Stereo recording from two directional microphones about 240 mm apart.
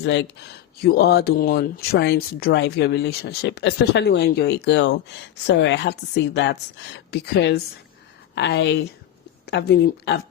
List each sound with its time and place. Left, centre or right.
0.0 s speech: left